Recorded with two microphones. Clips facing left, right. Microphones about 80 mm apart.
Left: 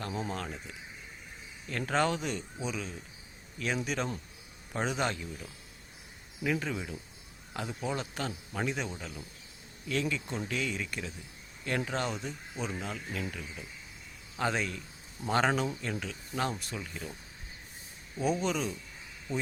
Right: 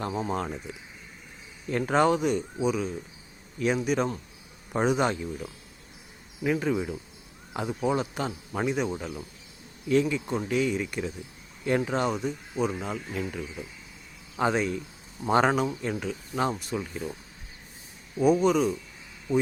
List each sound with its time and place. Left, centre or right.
0.0 s speech: right
1.7 s speech: centre
9.9 s speech: centre
18.2 s speech: centre